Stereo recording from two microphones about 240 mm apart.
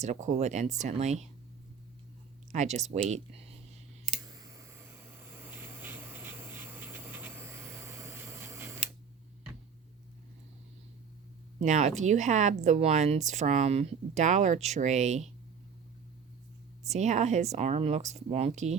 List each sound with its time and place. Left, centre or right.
0.0 s speech: right
2.5 s speech: right
4.1 s a sound: centre
11.6 s speech: right
16.9 s speech: right